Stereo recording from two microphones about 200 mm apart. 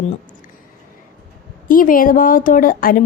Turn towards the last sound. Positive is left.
turn(degrees=45)  # may be behind; listen again after turning